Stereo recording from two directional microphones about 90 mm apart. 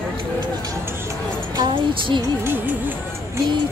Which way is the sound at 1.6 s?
60° right (ahead or behind).